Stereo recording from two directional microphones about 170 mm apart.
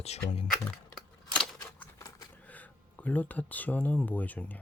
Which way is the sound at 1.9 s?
20° left (ahead or behind).